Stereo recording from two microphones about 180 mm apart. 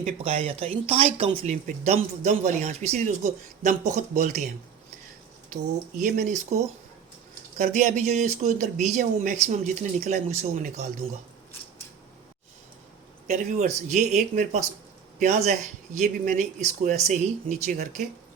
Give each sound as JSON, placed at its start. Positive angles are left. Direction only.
{"t": 0.0, "sound": "speech", "side_deg": -35}
{"t": 6.0, "sound": "speech", "side_deg": -45}
{"t": 7.6, "sound": "speech", "side_deg": -40}
{"t": 13.2, "sound": "speech", "side_deg": -40}